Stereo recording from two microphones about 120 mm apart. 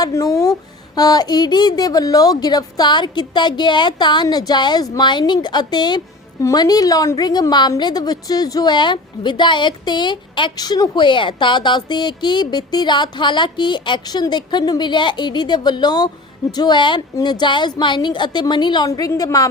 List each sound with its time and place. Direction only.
0.0 s a woman's voice: 30° left (ahead or behind)